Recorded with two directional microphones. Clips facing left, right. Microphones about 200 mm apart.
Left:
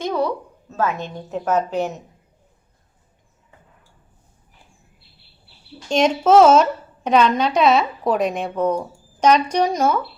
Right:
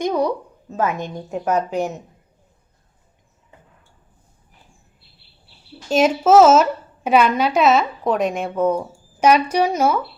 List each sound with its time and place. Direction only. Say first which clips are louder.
0.0 s a woman's voice: right 2 dB; 15° right (ahead or behind)
5.9 s a woman's voice: right 1 dB; 5° right (ahead or behind)